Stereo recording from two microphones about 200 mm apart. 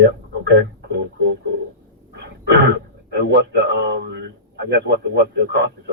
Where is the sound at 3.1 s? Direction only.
55° right (ahead or behind).